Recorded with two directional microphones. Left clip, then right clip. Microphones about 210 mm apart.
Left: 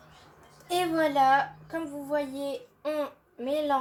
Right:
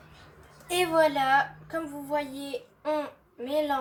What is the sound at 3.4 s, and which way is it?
Speech, 40° left (ahead or behind).